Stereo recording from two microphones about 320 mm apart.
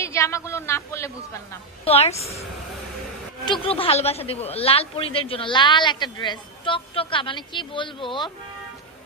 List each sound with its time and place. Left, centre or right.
0.0 s speech: centre
2.0 s a woman's voice: centre
3.6 s speech: centre